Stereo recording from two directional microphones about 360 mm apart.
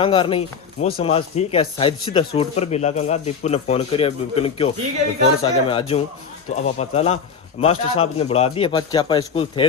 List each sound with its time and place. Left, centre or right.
0.0 s speech: centre